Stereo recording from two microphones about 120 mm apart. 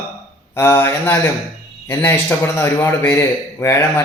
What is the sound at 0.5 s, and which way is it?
Speech, 20° left (ahead or behind).